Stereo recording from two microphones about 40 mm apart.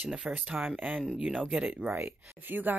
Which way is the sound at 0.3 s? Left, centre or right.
Right.